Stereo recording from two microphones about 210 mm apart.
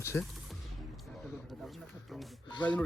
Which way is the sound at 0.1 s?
10° left (ahead or behind).